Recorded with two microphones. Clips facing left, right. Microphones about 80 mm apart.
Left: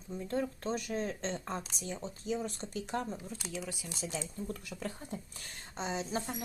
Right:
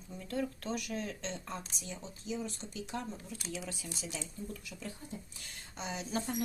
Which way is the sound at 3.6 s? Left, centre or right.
Centre.